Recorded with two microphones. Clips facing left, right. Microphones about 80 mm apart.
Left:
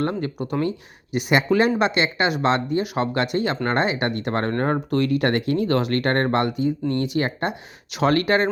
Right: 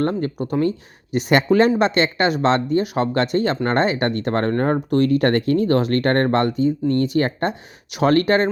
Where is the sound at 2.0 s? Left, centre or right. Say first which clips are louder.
Right 3 dB; centre.